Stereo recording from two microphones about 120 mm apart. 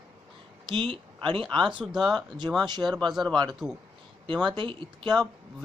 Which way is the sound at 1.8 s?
5° right (ahead or behind).